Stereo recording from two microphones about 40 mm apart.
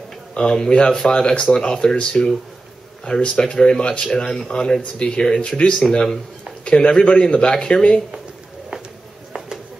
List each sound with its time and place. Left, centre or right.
0.3 s speech: left